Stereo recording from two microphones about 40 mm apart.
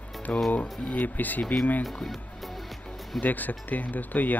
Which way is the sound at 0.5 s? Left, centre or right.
Left.